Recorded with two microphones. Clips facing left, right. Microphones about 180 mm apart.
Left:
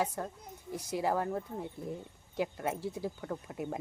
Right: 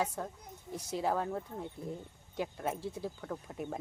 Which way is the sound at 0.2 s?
5° left (ahead or behind).